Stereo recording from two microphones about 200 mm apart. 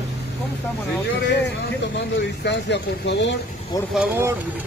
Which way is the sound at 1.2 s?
60° left (ahead or behind).